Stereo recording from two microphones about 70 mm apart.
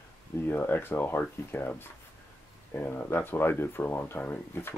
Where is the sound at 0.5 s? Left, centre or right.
Left.